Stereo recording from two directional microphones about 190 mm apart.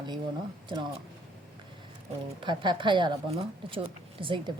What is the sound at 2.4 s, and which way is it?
Speech, 25° right (ahead or behind).